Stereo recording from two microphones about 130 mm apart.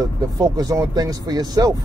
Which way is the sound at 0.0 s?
30° right (ahead or behind).